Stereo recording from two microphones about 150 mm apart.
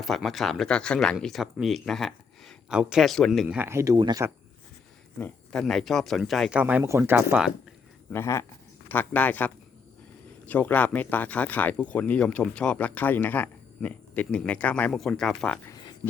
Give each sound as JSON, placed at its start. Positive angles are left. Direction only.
{"t": 0.0, "sound": "speech", "side_deg": 0}
{"t": 3.4, "sound": "speech", "side_deg": -10}
{"t": 5.2, "sound": "speech", "side_deg": 5}
{"t": 6.6, "sound": "speech", "side_deg": -10}
{"t": 8.1, "sound": "speech", "side_deg": 15}